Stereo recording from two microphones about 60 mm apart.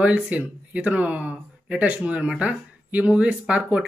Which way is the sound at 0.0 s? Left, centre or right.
Right.